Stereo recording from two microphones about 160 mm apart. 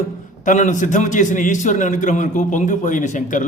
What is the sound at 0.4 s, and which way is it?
A man's voice, 50° left (ahead or behind).